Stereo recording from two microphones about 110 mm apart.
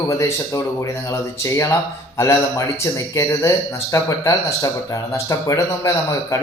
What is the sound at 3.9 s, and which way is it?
Speech, 30° left (ahead or behind).